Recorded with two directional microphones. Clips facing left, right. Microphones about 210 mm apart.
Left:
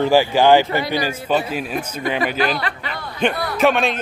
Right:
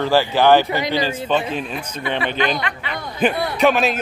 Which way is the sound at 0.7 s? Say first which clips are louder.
Even; 15° right (ahead or behind).